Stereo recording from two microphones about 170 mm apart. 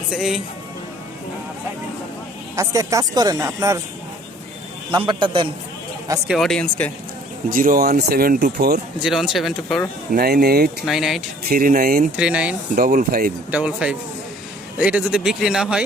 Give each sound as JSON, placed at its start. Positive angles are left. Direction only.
{"t": 0.1, "sound": "speech", "side_deg": -5}
{"t": 2.6, "sound": "speech", "side_deg": -20}
{"t": 5.0, "sound": "speech", "side_deg": -30}
{"t": 6.2, "sound": "speech", "side_deg": 0}
{"t": 7.5, "sound": "speech", "side_deg": -60}
{"t": 9.0, "sound": "speech", "side_deg": 0}
{"t": 10.1, "sound": "speech", "side_deg": -70}
{"t": 10.8, "sound": "speech", "side_deg": 0}
{"t": 11.4, "sound": "speech", "side_deg": -60}
{"t": 12.1, "sound": "speech", "side_deg": -5}
{"t": 12.7, "sound": "speech", "side_deg": -55}
{"t": 13.5, "sound": "speech", "side_deg": -5}